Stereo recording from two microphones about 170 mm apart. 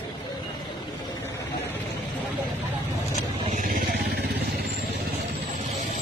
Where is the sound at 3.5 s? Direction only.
50° right (ahead or behind); by 4.7 s 75° right (ahead or behind).